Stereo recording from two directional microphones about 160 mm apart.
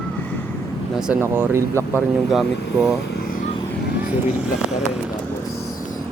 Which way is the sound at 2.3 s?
Centre (ahead or behind).